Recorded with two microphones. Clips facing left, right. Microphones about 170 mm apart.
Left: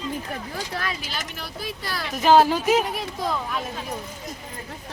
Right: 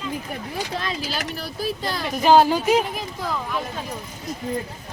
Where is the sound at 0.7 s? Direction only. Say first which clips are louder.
Right 2 dB; 25° right (ahead or behind).